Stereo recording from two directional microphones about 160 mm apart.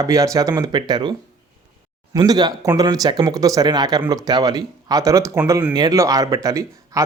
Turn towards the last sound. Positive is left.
turn(degrees=-20)  # may be behind; listen again after turning